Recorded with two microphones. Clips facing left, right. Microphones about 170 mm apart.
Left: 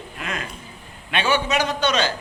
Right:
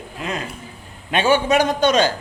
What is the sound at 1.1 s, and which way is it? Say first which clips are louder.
A man's voice: right 5 dB; 45° right (ahead or behind).